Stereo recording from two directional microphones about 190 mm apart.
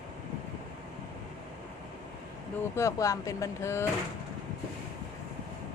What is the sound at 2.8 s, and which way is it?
Speech, 15° left (ahead or behind).